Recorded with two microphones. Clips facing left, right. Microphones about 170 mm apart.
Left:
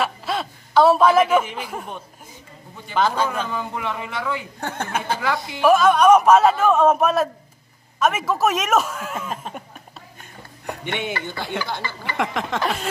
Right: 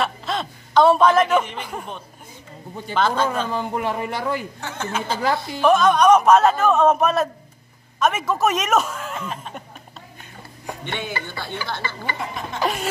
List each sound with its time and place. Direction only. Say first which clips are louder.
0.0 s a sound: even; 5° left (ahead or behind)
2.9 s a man's voice: even; 10° left (ahead or behind)
3.5 s speech: right 3 dB; 45° right (ahead or behind)
4.6 s speech: left 1 dB; 55° left (ahead or behind)
5.2 s a woman's voice: right 2 dB; 40° right (ahead or behind)
5.6 s a man's voice: left 1 dB; 5° left (ahead or behind)
10.9 s a man's voice: left 3 dB; 20° left (ahead or behind)
12.2 s speech: left 4 dB; 90° left